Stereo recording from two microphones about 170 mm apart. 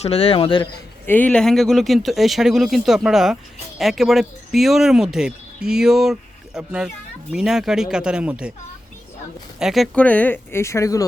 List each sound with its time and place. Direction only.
0.0 s a man's voice: 35° left (ahead or behind)
1.0 s speech: 10° left (ahead or behind); by 8.5 s 5° right (ahead or behind)
9.6 s speech: centre (ahead or behind); by 11.0 s 20° left (ahead or behind)